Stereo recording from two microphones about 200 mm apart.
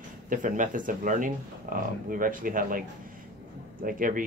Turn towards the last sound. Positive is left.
turn(degrees=-45)  # may be behind; listen again after turning